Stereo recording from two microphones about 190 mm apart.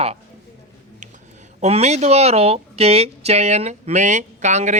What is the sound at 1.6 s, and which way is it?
A woman's voice, 35° right (ahead or behind).